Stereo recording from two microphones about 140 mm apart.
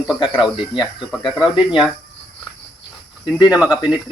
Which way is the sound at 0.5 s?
35° left (ahead or behind).